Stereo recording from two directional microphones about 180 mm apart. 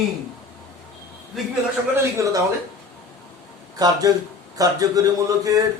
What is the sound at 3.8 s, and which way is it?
A man's voice, 20° right (ahead or behind).